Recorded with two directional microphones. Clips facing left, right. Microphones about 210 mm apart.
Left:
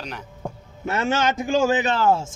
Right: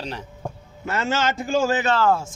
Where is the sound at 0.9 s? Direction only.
20° left (ahead or behind).